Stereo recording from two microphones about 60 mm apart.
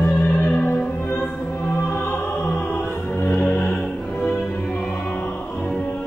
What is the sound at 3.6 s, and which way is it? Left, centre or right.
Music, centre.